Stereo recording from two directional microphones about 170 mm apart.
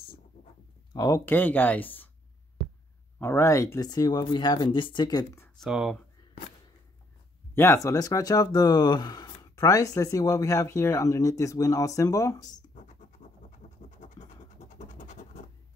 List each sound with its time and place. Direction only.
0.9 s speech: 20° left (ahead or behind)
3.2 s speech: 15° left (ahead or behind)
5.6 s speech: centre (ahead or behind)
7.5 s speech: 15° left (ahead or behind)
13.6 s scratch: 45° left (ahead or behind)